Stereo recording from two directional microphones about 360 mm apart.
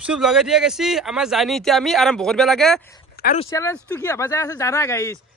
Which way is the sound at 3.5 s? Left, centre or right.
Centre.